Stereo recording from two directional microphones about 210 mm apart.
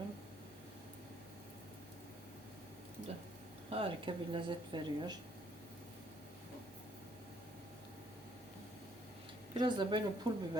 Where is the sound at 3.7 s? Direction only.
25° right (ahead or behind).